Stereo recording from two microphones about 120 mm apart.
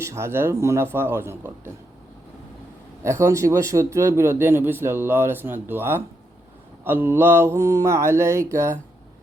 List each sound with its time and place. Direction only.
0.0 s speech: 25° right (ahead or behind)
3.0 s speech: 25° right (ahead or behind)